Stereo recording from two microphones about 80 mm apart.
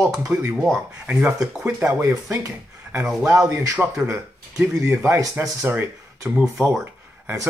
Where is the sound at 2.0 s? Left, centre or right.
Right.